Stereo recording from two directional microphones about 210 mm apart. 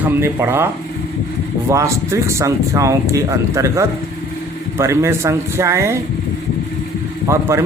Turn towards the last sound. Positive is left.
turn(degrees=-15)  # may be behind; listen again after turning